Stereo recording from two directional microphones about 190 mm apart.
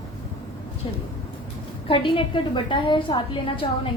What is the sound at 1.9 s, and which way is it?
A woman's voice, 25° left (ahead or behind).